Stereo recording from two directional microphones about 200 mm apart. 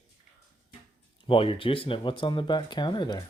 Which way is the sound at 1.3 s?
25° left (ahead or behind).